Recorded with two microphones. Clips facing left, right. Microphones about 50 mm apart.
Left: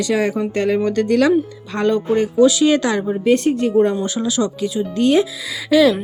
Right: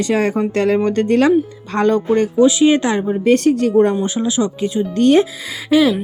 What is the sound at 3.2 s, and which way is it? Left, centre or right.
Speech, right.